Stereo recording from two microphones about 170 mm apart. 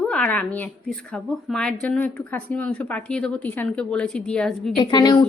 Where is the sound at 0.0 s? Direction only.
5° left (ahead or behind).